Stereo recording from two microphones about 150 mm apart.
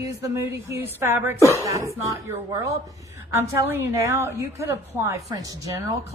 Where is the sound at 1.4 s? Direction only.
20° left (ahead or behind).